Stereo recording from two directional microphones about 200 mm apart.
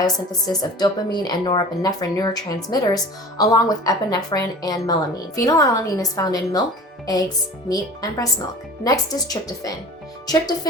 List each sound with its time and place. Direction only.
0.0 s a woman's voice: 20° left (ahead or behind)
7.7 s a woman's voice: 20° left (ahead or behind)